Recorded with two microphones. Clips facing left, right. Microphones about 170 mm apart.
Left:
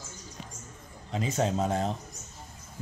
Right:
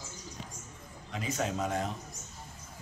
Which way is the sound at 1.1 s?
30° left (ahead or behind).